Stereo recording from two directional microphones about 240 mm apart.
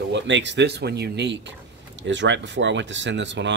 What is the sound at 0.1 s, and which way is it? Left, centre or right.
Speech, right.